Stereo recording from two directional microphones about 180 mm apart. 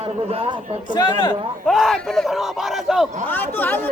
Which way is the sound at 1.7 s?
Centre (ahead or behind).